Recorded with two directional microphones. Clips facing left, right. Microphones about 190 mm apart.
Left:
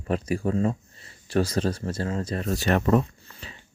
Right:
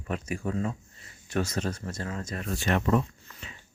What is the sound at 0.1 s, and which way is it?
Speech, 35° left (ahead or behind).